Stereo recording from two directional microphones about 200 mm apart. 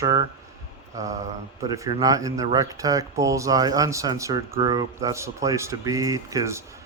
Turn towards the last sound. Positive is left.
turn(degrees=-15)  # may be behind; listen again after turning